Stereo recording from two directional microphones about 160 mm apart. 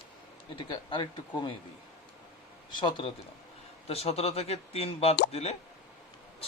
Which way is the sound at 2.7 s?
30° left (ahead or behind).